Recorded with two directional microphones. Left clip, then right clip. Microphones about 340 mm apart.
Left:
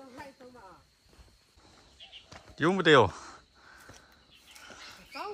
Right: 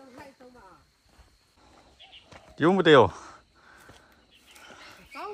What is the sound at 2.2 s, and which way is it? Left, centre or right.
Crow, centre.